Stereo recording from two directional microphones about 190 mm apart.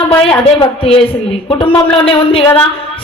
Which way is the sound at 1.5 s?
25° left (ahead or behind).